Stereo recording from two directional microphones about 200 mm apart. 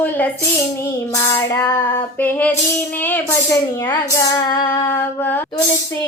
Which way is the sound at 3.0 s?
10° left (ahead or behind).